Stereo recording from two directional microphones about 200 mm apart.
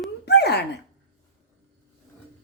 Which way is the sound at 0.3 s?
55° left (ahead or behind).